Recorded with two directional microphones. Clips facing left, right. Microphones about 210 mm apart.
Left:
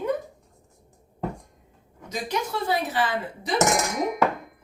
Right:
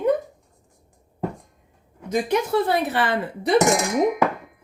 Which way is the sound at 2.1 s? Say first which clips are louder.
Right 8 dB; 55° right (ahead or behind).